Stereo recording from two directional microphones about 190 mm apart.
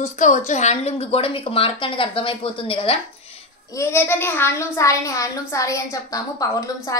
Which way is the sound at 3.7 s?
15° left (ahead or behind).